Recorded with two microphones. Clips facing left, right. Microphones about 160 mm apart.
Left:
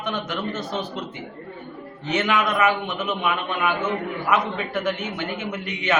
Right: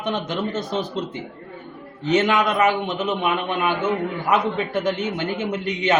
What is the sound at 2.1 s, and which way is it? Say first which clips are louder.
A man's voice: right 3 dB; 35° right (ahead or behind).